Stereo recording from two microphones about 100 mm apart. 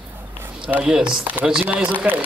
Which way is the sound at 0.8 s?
10° right (ahead or behind).